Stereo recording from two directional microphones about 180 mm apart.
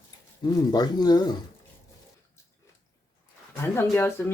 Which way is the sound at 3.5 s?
15° left (ahead or behind).